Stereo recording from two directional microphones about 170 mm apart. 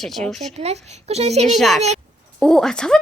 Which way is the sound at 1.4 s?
Centre (ahead or behind).